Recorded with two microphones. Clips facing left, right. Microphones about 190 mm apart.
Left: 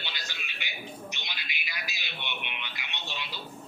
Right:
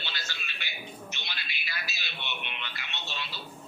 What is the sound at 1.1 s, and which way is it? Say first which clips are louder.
Music: left 1 dB; 15° left (ahead or behind).